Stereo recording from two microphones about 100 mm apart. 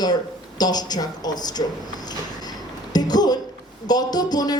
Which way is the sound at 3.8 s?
40° left (ahead or behind).